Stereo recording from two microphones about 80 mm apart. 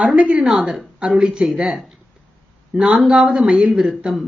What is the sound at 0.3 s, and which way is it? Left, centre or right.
Speech, centre.